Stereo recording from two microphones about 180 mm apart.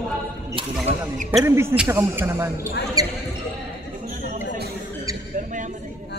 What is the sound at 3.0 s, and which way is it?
Basketball bounce, 20° right (ahead or behind).